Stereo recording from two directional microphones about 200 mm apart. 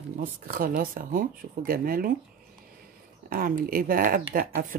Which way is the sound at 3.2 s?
45° right (ahead or behind).